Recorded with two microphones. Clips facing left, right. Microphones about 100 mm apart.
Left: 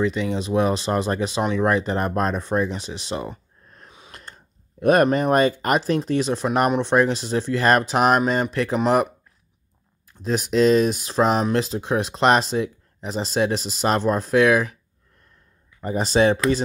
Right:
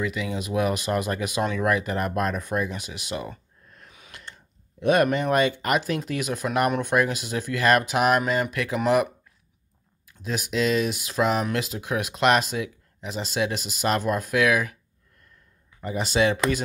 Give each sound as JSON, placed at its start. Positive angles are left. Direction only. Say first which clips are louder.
{"t": 0.0, "sound": "speech", "louder": "left 6 dB", "side_deg": 30}
{"t": 4.1, "sound": "speech", "louder": "even", "side_deg": 40}
{"t": 15.8, "sound": "speech", "louder": "left 4 dB", "side_deg": 40}